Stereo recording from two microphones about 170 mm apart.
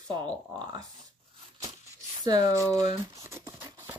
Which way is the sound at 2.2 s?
25° right (ahead or behind).